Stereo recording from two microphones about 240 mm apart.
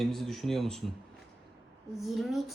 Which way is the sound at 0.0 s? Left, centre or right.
Centre.